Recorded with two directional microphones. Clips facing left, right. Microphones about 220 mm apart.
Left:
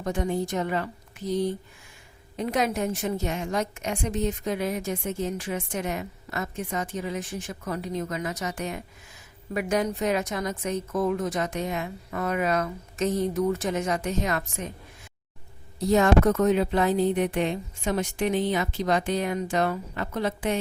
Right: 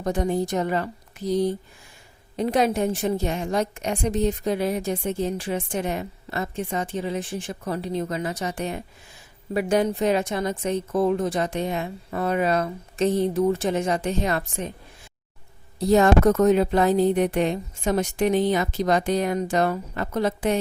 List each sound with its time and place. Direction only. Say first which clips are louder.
0.0 s a woman's voice: right 3 dB; 35° right (ahead or behind)
15.8 s a woman's voice: right 3 dB; 35° right (ahead or behind)